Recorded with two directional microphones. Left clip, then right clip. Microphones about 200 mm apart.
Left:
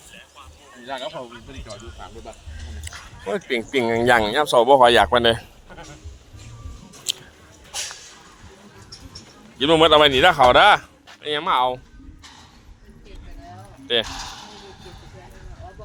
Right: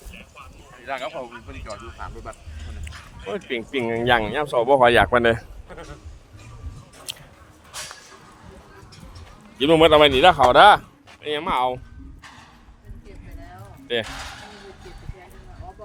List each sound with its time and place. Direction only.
0.9 s speech: 15° left (ahead or behind)
3.2 s speech: 10° left (ahead or behind)
4.8 s a man's voice: 10° right (ahead or behind)
9.6 s a man's voice: 20° right (ahead or behind)
10.5 s a sound: 5° right (ahead or behind)
11.2 s a man's voice: 20° right (ahead or behind)
13.8 s speech: 10° right (ahead or behind)